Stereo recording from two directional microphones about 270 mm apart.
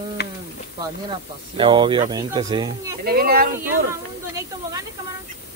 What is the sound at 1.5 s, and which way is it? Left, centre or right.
Speech, centre.